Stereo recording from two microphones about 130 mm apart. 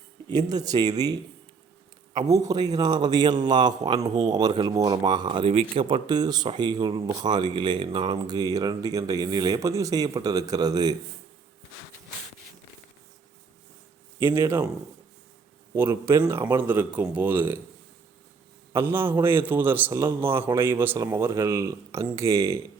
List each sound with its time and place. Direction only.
0.3 s speech: 30° right (ahead or behind)
2.1 s speech: 25° right (ahead or behind)
14.3 s speech: 20° right (ahead or behind)
15.7 s a man's voice: 20° right (ahead or behind)
18.7 s a man's voice: 20° right (ahead or behind)